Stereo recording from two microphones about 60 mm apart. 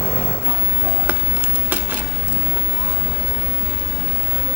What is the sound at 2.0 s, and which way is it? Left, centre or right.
Vehicle, centre.